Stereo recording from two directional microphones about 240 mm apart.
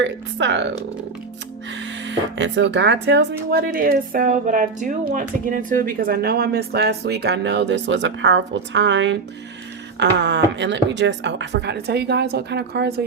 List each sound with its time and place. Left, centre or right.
0.0 s speech: right
1.8 s speech: right